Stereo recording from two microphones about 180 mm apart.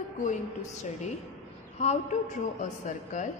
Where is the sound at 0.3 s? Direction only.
40° left (ahead or behind).